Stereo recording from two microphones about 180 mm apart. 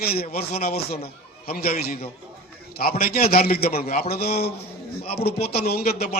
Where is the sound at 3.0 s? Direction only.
60° left (ahead or behind).